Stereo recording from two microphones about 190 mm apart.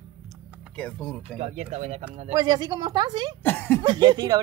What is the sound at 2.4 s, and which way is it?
Speech, 20° right (ahead or behind).